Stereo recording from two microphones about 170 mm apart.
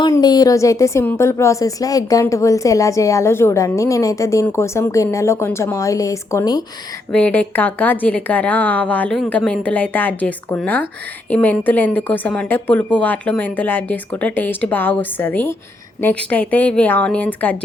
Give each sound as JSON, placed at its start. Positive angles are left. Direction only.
{"t": 0.0, "sound": "a woman's voice", "side_deg": 25}
{"t": 7.1, "sound": "speech", "side_deg": 10}